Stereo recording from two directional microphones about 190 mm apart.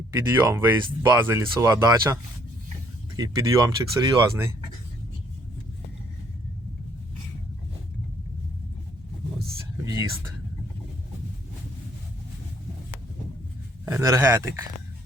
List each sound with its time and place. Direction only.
0.1 s speech: 15° right (ahead or behind)
3.2 s speech: 20° right (ahead or behind)
9.8 s whispering: 20° right (ahead or behind)
13.8 s speech: 15° right (ahead or behind)